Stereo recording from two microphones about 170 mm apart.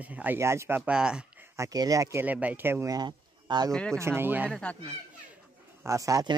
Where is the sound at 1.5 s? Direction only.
20° right (ahead or behind).